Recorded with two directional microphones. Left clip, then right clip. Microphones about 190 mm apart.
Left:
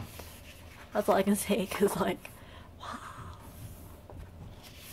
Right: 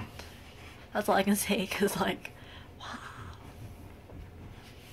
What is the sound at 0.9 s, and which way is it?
Speech, 20° left (ahead or behind).